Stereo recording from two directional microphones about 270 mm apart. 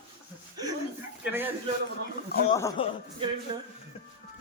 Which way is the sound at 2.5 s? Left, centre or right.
Centre.